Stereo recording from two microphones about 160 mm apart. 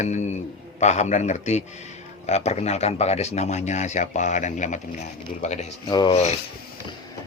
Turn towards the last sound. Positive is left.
turn(degrees=40)  # may be behind; listen again after turning